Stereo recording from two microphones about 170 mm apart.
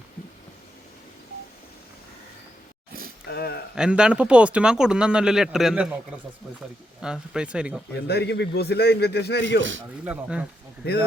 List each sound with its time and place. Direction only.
3.2 s a sound: 70° left (ahead or behind)
3.8 s speech: 5° right (ahead or behind)
7.0 s speech: 5° right (ahead or behind)
8.0 s a man's voice: 75° left (ahead or behind)
10.0 s speech: 5° right (ahead or behind)